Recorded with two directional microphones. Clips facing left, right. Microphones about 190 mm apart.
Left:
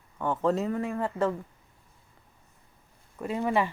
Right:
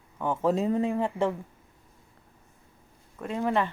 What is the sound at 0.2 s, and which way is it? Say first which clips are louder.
Speech: right 1 dB; 10° right (ahead or behind).